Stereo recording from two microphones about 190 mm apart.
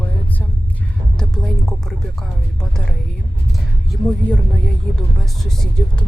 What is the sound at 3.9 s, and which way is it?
Speech, 5° left (ahead or behind).